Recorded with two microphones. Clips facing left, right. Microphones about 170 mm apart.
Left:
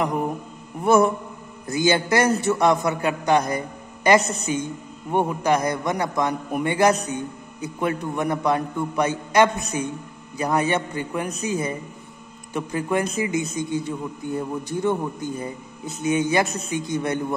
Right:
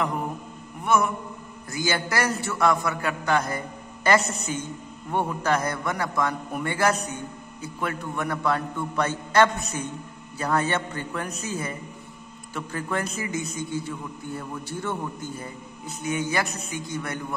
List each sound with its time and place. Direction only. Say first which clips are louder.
0.8 s mantra: left 6 dB; 30° left (ahead or behind)
1.7 s a man's voice: left 7 dB; 20° left (ahead or behind)